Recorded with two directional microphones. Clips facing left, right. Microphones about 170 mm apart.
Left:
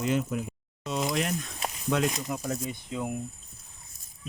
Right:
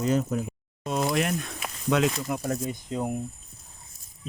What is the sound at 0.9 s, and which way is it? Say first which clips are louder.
Speech: right 3 dB; 55° right (ahead or behind).